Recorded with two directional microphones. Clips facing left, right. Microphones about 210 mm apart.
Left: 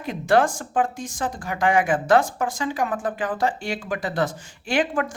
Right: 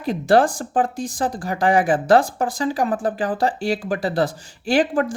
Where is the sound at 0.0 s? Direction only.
35° right (ahead or behind).